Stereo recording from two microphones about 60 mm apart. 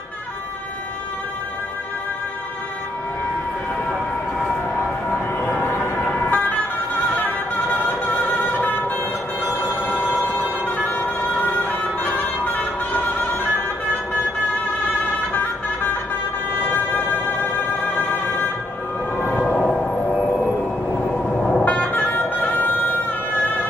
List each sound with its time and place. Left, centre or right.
5.4 s a sound: left
5.8 s emergency vehicle: left
7.2 s music: left
10.2 s music: left
15.3 s music: left
19.1 s a sound: left
19.5 s music: centre
21.4 s music: centre
21.9 s music: left